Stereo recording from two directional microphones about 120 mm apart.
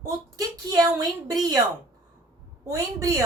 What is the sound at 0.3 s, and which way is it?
A woman's voice, 30° right (ahead or behind).